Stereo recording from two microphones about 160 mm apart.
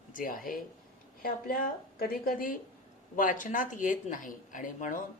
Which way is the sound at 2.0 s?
65° left (ahead or behind).